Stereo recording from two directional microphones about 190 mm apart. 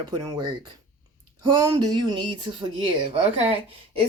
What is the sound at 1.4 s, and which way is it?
A woman's voice, 20° right (ahead or behind).